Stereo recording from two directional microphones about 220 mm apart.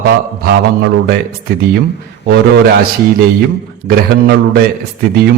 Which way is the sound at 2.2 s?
50° right (ahead or behind).